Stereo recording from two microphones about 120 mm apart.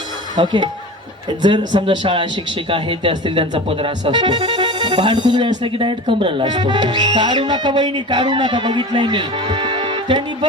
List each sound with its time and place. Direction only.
0.3 s speech: 40° right (ahead or behind)